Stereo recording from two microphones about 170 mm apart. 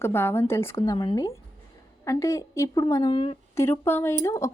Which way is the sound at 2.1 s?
20° left (ahead or behind).